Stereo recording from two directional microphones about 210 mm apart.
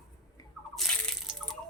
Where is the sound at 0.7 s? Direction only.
Centre (ahead or behind).